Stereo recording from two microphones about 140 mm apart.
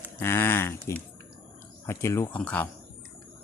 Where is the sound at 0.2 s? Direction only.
15° left (ahead or behind).